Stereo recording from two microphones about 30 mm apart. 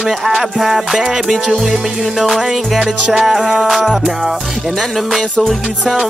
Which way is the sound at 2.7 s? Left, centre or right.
Centre.